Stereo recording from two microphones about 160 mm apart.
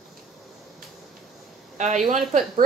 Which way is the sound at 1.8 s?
50° right (ahead or behind).